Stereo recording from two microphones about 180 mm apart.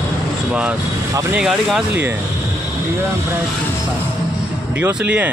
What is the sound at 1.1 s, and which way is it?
Speech, 20° right (ahead or behind).